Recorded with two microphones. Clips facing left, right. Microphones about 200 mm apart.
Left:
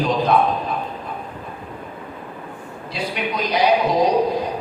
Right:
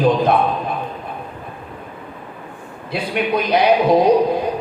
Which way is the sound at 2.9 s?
55° right (ahead or behind).